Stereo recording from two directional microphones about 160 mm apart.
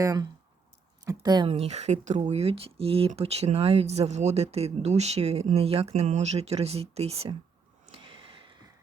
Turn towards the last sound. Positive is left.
turn(degrees=-40)  # may be behind; listen again after turning